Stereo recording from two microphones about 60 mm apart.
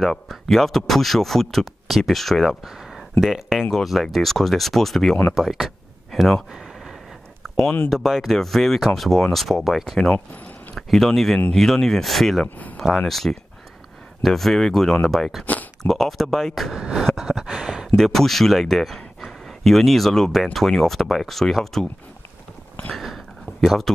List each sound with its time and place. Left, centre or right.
0.0 s speech: centre
2.6 s speech: centre
6.5 s a sound: centre
7.9 s speech: centre
10.1 s speech: left
10.7 s speech: centre
12.4 s speech: left
12.9 s speech: centre
15.4 s a sound: left
15.8 s speech: centre
17.1 s a sound: centre
17.9 s speech: centre
22.9 s a sound: centre